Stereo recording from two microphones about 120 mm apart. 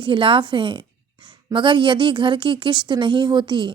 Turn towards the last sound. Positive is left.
turn(degrees=-40)  # may be behind; listen again after turning